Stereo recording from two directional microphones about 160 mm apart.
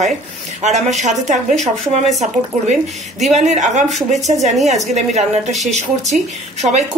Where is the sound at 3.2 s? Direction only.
45° right (ahead or behind).